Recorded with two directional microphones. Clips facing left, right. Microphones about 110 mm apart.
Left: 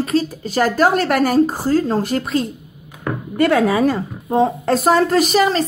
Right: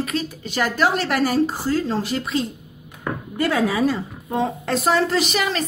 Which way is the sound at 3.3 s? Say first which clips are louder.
Left 6 dB; 60° left (ahead or behind).